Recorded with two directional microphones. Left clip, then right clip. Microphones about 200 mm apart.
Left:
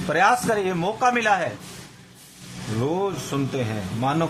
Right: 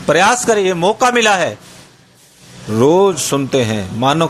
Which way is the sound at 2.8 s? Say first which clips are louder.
Right 14 dB; 35° right (ahead or behind).